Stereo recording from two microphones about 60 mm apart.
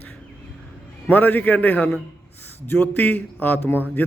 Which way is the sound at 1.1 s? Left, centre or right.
Left.